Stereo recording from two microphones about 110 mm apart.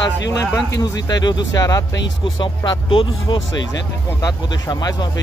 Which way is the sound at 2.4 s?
45° left (ahead or behind).